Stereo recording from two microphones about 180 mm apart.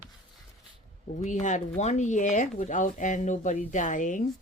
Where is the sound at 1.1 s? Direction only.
40° left (ahead or behind).